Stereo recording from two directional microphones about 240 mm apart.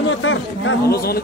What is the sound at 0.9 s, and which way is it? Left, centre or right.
Speech, left.